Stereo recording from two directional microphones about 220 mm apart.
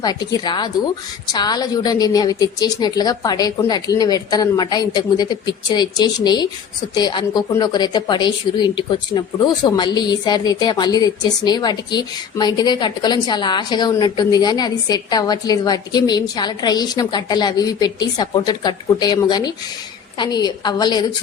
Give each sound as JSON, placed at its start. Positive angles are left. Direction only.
{"t": 0.0, "sound": "a woman's voice", "side_deg": 20}